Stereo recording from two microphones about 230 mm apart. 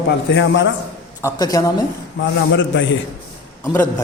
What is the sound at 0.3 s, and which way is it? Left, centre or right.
Speech, left.